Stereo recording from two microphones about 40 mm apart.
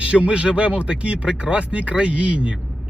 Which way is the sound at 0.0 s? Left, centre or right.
Right.